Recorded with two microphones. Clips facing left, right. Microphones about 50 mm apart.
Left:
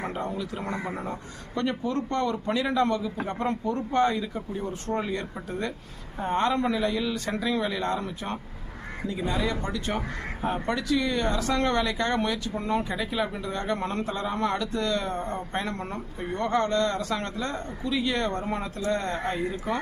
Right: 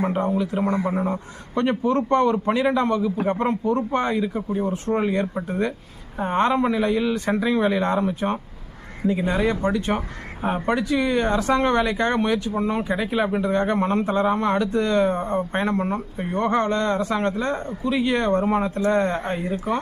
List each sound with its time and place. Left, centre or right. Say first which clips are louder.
0.0 s a man's voice: right 9 dB; right
12.9 s a man's voice: right 6 dB; right
15.8 s speech: right 9 dB; centre
16.3 s a man's voice: right 4 dB; right